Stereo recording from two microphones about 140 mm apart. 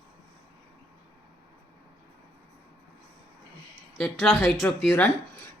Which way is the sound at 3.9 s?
5° left (ahead or behind).